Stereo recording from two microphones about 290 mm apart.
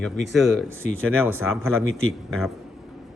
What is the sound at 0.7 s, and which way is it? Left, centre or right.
Speech, right.